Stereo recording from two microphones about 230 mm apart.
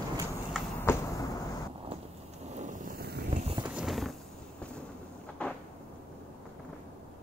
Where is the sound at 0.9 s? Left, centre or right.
Centre.